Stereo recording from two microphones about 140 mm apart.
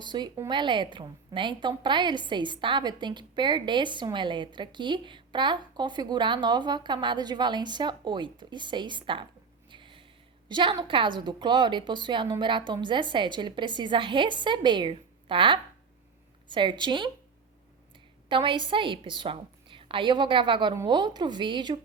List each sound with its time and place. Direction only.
0.0 s a woman's voice: 30° right (ahead or behind)
9.6 s a sound: 35° right (ahead or behind)
10.5 s a woman's voice: 35° right (ahead or behind)